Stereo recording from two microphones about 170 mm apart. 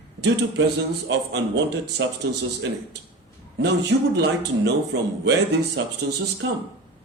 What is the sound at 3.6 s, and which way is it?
A man's voice, 85° right.